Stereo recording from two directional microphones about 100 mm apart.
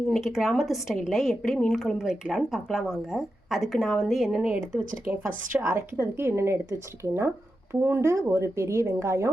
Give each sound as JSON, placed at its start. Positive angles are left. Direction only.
{"t": 0.1, "sound": "a woman's voice", "side_deg": 0}